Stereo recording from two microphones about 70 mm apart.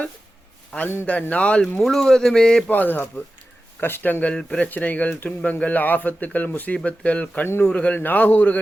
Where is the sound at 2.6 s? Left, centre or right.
Left.